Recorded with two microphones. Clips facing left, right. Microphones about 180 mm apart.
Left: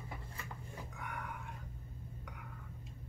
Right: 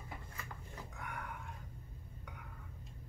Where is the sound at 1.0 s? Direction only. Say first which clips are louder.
Even; centre (ahead or behind).